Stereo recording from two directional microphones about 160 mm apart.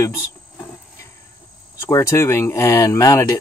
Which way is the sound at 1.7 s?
15° left (ahead or behind).